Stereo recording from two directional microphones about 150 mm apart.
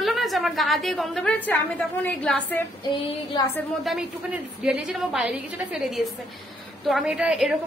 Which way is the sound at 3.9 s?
5° right (ahead or behind).